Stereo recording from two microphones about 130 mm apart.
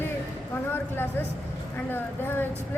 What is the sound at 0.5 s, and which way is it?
Speech, 15° left (ahead or behind).